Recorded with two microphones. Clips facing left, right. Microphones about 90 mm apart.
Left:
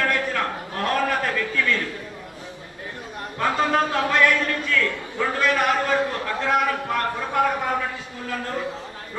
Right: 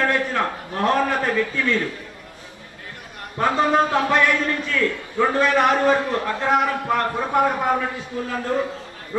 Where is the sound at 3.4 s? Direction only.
25° right (ahead or behind).